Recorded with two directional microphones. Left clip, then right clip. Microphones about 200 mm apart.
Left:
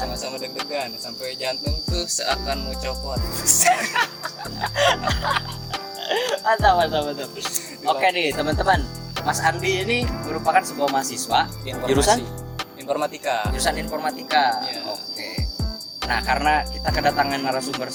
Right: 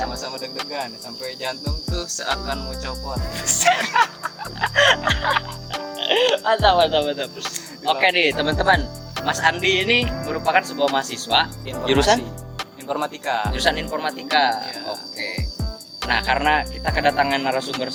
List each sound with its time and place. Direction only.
0.1 s speech: 40° left (ahead or behind)
4.7 s music: 5° right (ahead or behind)
5.7 s speech: centre (ahead or behind)
12.9 s speech: 35° left (ahead or behind)
13.5 s speech: 10° left (ahead or behind)
16.0 s speech: 5° left (ahead or behind)